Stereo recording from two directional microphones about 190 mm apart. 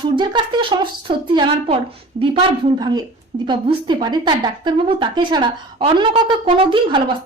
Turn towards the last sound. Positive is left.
turn(degrees=-25)  # may be behind; listen again after turning